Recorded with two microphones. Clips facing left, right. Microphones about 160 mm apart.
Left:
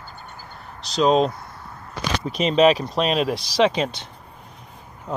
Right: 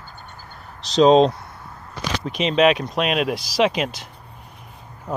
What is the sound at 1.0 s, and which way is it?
Speech, 25° right (ahead or behind).